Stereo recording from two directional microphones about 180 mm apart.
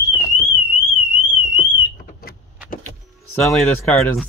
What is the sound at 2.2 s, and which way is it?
Vehicle, 55° left (ahead or behind).